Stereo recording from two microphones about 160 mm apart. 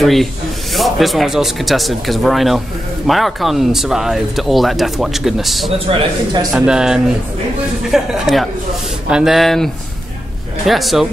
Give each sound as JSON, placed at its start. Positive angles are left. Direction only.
{"t": 0.0, "sound": "speech", "side_deg": 0}
{"t": 5.9, "sound": "speech", "side_deg": -35}
{"t": 6.5, "sound": "speech", "side_deg": -5}
{"t": 10.7, "sound": "speech", "side_deg": 0}